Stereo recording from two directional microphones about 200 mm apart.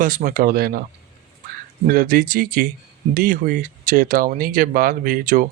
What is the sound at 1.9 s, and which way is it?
Speech, 45° right (ahead or behind).